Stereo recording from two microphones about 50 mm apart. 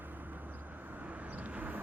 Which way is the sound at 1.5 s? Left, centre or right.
Right.